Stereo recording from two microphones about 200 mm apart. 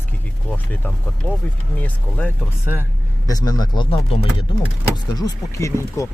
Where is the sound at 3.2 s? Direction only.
20° left (ahead or behind).